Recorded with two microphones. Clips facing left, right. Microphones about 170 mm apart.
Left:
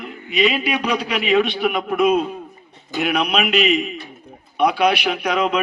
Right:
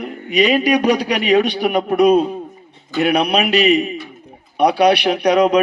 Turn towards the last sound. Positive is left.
turn(degrees=-40)  # may be behind; listen again after turning